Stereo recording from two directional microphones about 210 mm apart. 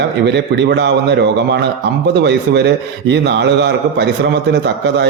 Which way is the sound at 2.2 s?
55° right (ahead or behind).